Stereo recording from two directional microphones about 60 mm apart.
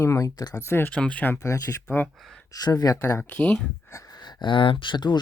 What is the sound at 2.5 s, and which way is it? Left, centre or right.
Speech, left.